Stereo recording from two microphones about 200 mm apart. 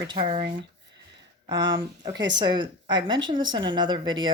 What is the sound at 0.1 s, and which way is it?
Speech, 25° right (ahead or behind).